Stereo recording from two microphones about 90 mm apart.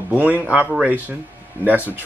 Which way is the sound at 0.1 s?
20° right (ahead or behind).